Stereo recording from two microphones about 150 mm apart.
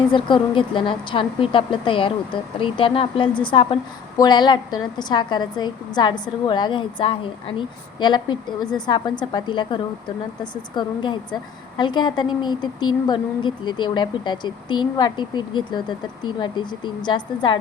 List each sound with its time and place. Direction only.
0.1 s a woman's voice: 35° left (ahead or behind)